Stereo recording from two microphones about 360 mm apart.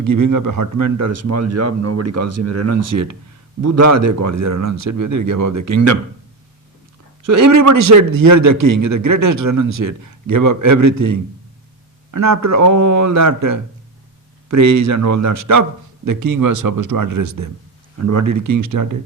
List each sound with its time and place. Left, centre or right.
0.0 s speech: right
7.3 s speech: right
8.1 s a man's voice: right
8.4 s a man's voice: right